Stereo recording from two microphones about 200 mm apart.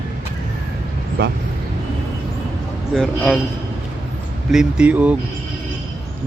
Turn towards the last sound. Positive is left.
turn(degrees=-5)  # may be behind; listen again after turning